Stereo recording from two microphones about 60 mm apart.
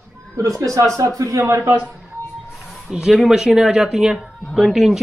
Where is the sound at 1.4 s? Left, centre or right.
Right.